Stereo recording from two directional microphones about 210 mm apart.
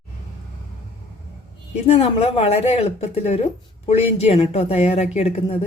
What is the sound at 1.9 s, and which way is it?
Speech, 30° left (ahead or behind).